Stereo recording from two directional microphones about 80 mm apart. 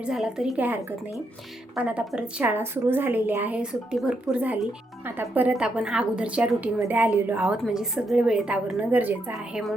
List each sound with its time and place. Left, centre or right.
0.0 s a woman's voice: centre
0.5 s a woman's voice: right
2.5 s a woman's voice: right
3.6 s a woman's voice: centre
7.7 s a woman's voice: centre
9.3 s speech: centre